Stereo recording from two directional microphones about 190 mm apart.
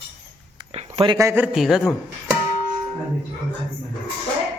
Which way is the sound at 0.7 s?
30° right (ahead or behind).